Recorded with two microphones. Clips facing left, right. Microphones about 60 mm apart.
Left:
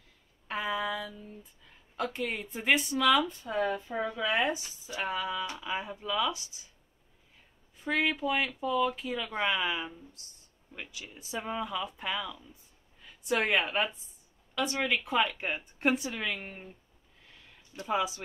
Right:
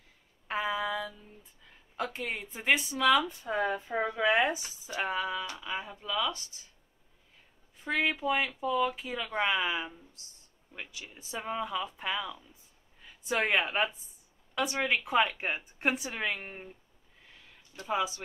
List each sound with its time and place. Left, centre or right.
0.5 s a sound: centre
3.4 s speech: right
5.6 s speech: centre
7.7 s speech: centre
17.8 s speech: centre